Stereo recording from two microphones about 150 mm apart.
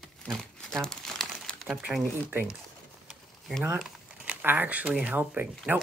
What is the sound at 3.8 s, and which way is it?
Speech, 5° right (ahead or behind).